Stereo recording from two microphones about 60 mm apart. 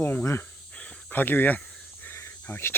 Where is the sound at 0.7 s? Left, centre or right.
Centre.